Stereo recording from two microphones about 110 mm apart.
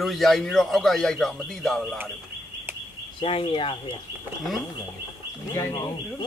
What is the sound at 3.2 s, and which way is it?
Speech, 55° left (ahead or behind).